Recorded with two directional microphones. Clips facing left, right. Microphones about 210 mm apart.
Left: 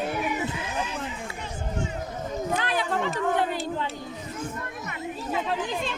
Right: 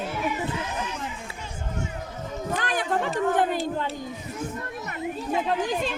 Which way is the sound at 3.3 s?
50° right (ahead or behind).